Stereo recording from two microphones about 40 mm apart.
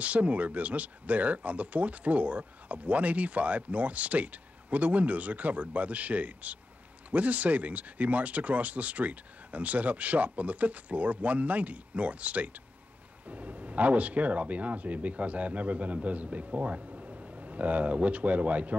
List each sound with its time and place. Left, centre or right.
0.0 s speech: right